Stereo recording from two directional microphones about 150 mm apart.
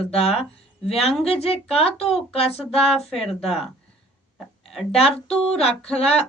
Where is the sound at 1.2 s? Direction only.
40° left (ahead or behind).